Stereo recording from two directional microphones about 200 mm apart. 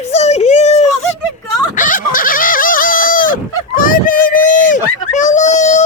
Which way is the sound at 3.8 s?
45° left (ahead or behind).